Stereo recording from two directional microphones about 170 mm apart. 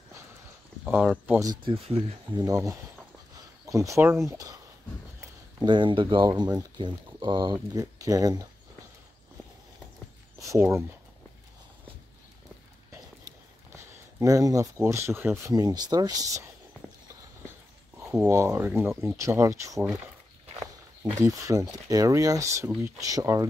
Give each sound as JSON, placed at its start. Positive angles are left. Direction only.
{"t": 0.8, "sound": "speech", "side_deg": -10}
{"t": 1.5, "sound": "speech", "side_deg": -30}
{"t": 2.4, "sound": "speech", "side_deg": -20}
{"t": 5.6, "sound": "speech", "side_deg": -30}
{"t": 10.4, "sound": "speech", "side_deg": -15}
{"t": 14.2, "sound": "speech", "side_deg": -20}
{"t": 17.9, "sound": "speech", "side_deg": -15}
{"t": 21.2, "sound": "speech", "side_deg": -20}